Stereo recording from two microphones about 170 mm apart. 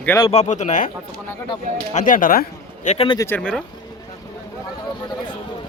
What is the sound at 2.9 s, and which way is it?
Speech, 35° left (ahead or behind).